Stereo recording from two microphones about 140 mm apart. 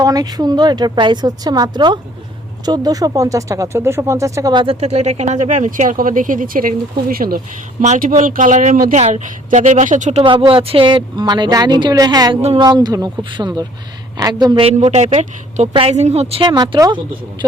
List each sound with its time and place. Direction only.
0.0 s a woman's voice: 25° right (ahead or behind)
4.5 s speech: 40° right (ahead or behind); by 7.9 s 90° right
7.9 s a woman's voice: 75° right (ahead or behind); by 10.2 s 55° right (ahead or behind)
10.2 s a woman's voice: 35° right (ahead or behind)
14.8 s a woman's voice: 50° right (ahead or behind)
15.7 s a woman's voice: 45° right (ahead or behind)
16.4 s speech: 30° right (ahead or behind)